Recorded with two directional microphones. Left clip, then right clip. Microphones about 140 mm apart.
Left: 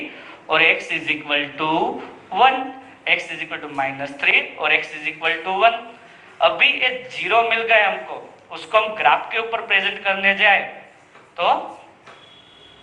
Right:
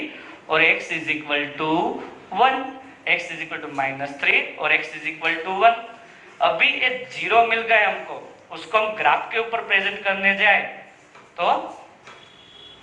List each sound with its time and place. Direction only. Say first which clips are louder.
0.4 s speech: left 2 dB; 15° left (ahead or behind)